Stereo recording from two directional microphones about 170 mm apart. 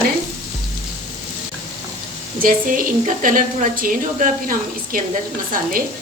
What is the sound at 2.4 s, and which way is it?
A woman's voice, 50° right (ahead or behind).